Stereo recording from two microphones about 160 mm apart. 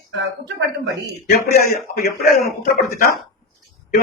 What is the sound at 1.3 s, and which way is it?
A man's voice, 70° left (ahead or behind).